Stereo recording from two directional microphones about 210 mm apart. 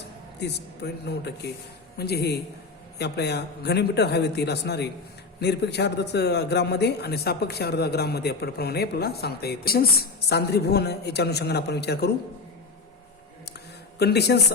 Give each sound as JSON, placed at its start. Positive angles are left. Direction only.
{"t": 0.3, "sound": "a man's voice", "side_deg": 50}
{"t": 14.0, "sound": "a man's voice", "side_deg": 50}